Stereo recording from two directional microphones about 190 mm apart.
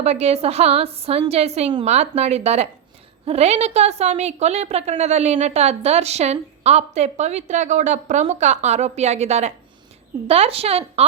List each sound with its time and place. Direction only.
0.0 s a woman's voice: 35° right (ahead or behind)